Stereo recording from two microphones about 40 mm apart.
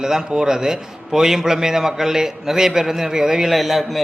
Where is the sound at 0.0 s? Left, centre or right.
Centre.